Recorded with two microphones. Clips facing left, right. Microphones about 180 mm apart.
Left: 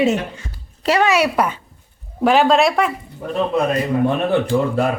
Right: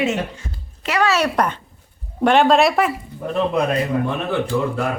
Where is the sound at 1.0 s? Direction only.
10° left (ahead or behind).